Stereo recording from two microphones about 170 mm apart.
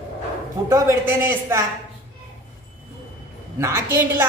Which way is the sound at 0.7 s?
15° right (ahead or behind).